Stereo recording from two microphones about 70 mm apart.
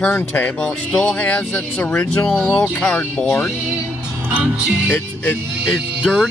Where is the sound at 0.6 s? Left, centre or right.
Centre.